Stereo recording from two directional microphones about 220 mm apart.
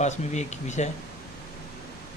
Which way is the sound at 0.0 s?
30° left (ahead or behind).